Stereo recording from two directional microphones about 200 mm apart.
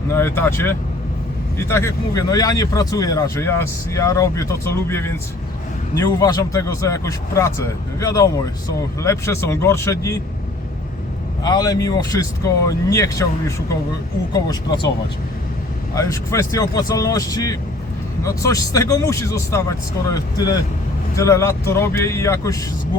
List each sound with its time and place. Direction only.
0.1 s speech: 10° left (ahead or behind)
11.4 s speech: 20° left (ahead or behind)
14.3 s speech: 20° left (ahead or behind)
16.0 s speech: 15° left (ahead or behind)